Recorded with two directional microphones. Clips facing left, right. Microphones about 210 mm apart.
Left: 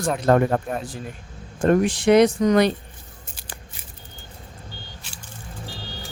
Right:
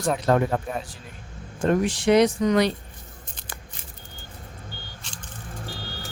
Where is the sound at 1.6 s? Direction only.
50° left (ahead or behind).